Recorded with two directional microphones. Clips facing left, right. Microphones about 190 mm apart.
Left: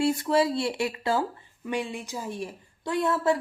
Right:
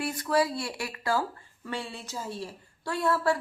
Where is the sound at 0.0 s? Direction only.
25° left (ahead or behind).